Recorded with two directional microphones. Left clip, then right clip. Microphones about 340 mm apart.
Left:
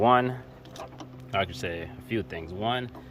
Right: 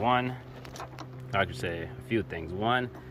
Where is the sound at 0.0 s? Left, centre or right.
Centre.